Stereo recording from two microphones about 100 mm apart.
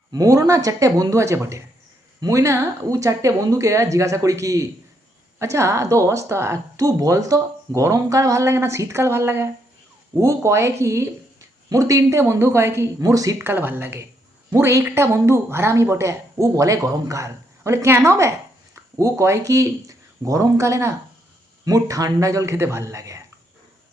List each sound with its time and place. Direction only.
0.1 s a woman's voice: 35° right (ahead or behind)
13.4 s a woman's voice: 20° right (ahead or behind)